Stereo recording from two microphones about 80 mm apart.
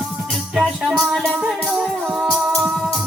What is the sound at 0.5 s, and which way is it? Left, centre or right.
Music, centre.